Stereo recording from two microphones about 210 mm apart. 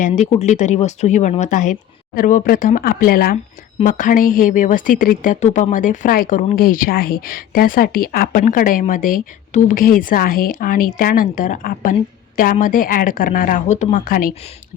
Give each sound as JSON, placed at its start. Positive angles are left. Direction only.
{"t": 0.0, "sound": "speech", "side_deg": 35}